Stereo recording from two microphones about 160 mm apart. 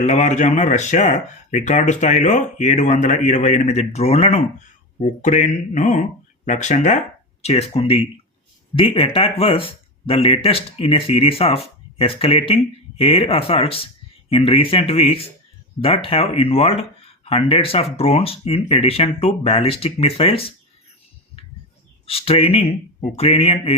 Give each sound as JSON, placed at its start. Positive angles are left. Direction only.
{"t": 0.0, "sound": "speech", "side_deg": 45}
{"t": 22.0, "sound": "speech", "side_deg": 35}